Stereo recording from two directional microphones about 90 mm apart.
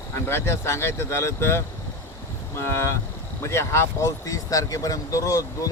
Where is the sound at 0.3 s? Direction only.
30° left (ahead or behind).